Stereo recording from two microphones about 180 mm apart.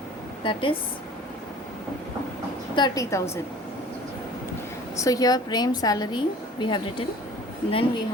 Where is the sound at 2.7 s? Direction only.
20° left (ahead or behind).